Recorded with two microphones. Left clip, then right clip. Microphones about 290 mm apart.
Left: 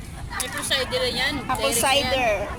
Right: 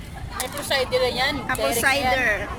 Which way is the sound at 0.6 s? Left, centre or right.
Centre.